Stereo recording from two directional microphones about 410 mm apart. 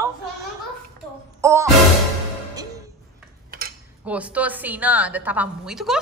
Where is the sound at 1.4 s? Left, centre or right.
Centre.